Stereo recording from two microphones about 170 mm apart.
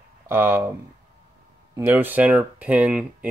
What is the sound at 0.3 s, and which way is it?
Speech, 15° right (ahead or behind).